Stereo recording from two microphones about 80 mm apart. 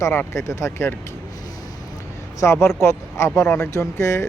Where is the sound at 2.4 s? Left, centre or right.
Left.